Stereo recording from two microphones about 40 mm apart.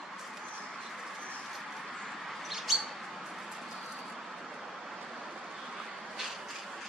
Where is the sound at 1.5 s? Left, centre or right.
Centre.